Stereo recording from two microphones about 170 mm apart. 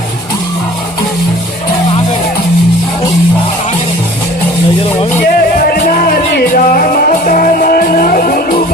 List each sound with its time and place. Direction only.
5.7 s music: 55° left (ahead or behind)